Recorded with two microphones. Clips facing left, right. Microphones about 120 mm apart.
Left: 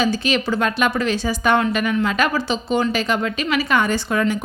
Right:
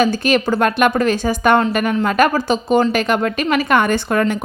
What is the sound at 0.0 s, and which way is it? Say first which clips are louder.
A woman's voice: right 4 dB; 50° right (ahead or behind).